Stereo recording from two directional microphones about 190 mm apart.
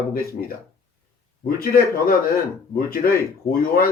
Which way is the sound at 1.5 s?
50° left (ahead or behind).